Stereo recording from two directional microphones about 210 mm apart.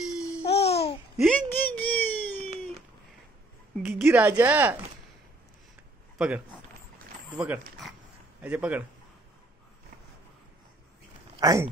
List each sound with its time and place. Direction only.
0.4 s babbling: 30° left (ahead or behind)
1.1 s a sound: 5° left (ahead or behind)
3.8 s speech: 10° right (ahead or behind)
6.1 s a man's voice: 5° right (ahead or behind)
11.3 s speech: 15° right (ahead or behind)